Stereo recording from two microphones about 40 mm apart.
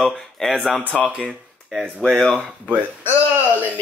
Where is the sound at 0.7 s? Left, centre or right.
Left.